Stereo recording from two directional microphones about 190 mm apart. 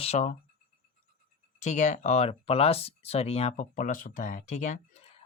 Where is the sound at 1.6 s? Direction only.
40° left (ahead or behind).